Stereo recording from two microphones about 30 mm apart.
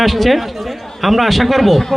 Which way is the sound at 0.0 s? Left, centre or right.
Centre.